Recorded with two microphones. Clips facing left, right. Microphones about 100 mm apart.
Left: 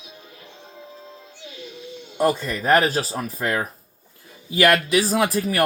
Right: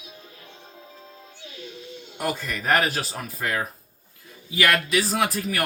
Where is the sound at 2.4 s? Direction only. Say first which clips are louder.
Left 4 dB; 35° left (ahead or behind).